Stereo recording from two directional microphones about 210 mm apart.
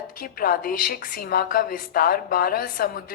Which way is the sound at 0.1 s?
45° left (ahead or behind).